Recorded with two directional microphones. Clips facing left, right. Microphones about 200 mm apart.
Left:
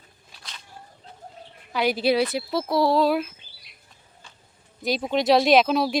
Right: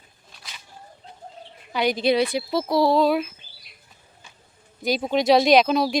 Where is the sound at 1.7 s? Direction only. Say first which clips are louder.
Right 1 dB; 5° left (ahead or behind).